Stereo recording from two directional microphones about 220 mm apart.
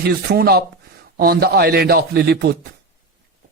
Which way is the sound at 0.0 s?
45° right (ahead or behind).